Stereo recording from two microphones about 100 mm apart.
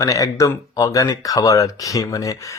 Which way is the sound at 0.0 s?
35° left (ahead or behind).